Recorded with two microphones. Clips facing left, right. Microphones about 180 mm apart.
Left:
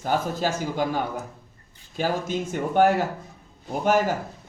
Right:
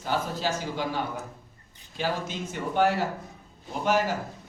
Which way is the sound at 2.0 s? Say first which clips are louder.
Left 5 dB; 45° left (ahead or behind).